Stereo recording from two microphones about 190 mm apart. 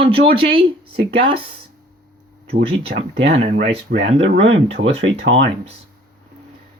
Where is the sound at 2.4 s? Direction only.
30° right (ahead or behind).